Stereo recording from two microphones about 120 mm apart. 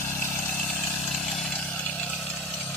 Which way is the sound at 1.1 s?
Centre (ahead or behind).